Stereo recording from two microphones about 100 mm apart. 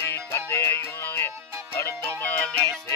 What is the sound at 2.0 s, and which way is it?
Music, 15° left (ahead or behind).